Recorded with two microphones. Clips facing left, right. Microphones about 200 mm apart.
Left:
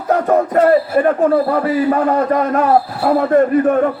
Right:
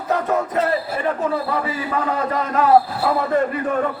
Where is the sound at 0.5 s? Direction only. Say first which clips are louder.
Left 9 dB; 50° left (ahead or behind).